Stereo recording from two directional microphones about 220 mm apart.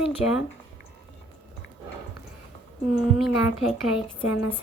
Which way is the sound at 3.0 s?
Centre (ahead or behind).